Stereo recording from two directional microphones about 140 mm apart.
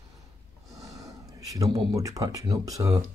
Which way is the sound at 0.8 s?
25° right (ahead or behind).